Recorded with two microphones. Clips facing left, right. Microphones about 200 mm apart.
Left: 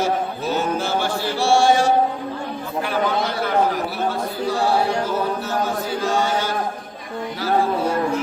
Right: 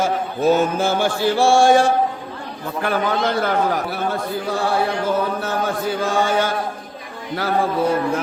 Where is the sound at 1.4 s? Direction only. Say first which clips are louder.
Right 3 dB; 50° right (ahead or behind).